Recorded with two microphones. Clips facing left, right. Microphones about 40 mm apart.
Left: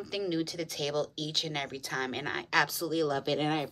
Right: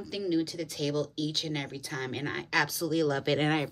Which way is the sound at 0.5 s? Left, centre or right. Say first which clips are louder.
Right 1 dB; left.